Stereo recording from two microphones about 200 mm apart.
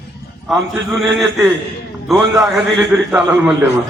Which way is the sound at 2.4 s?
5° right (ahead or behind).